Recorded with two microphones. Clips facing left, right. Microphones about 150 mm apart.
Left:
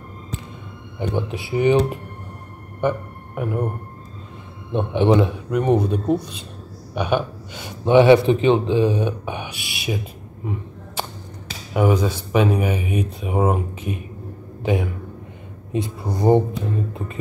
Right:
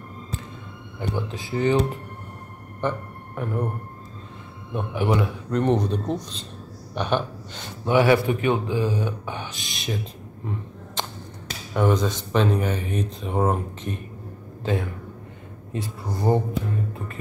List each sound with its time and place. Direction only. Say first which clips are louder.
0.9 s speech: left 4 dB; 15° left (ahead or behind)
2.8 s speech: left 5 dB; 10° left (ahead or behind)
4.7 s speech: left 7 dB; 25° left (ahead or behind)
5.5 s speech: left 1 dB; 10° left (ahead or behind)
7.0 s a sound: left 3 dB; 10° left (ahead or behind)
7.9 s speech: left 6 dB; 20° left (ahead or behind)
11.7 s a man's voice: left 3 dB; 10° left (ahead or behind)